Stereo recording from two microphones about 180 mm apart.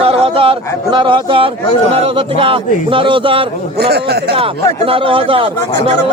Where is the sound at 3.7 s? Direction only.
65° right (ahead or behind).